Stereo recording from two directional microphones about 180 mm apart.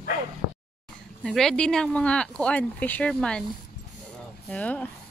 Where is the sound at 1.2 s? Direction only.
Centre (ahead or behind).